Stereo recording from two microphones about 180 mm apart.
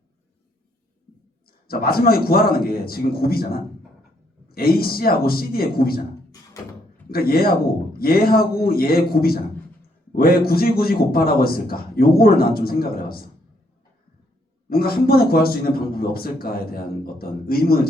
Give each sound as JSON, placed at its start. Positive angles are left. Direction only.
{"t": 1.5, "sound": "a man's voice", "side_deg": 55}
{"t": 7.1, "sound": "a man's voice", "side_deg": 55}
{"t": 14.7, "sound": "a man's voice", "side_deg": 55}